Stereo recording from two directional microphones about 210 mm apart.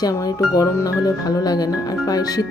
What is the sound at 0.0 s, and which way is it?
Speech, 15° left (ahead or behind).